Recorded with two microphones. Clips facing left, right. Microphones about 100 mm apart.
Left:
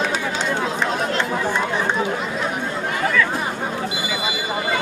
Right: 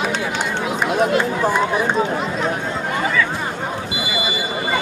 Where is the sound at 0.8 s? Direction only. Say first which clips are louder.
Right 4 dB; 10° right (ahead or behind).